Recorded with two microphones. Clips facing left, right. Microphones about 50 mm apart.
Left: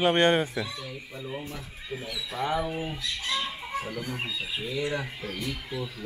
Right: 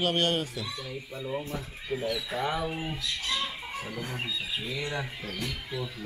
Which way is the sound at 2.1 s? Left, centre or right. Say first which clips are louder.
Left 5 dB; centre.